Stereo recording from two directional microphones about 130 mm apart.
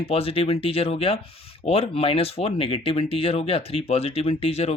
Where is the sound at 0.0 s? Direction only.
45° left (ahead or behind).